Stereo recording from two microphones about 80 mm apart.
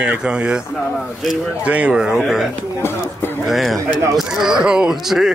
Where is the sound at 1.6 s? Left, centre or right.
Centre.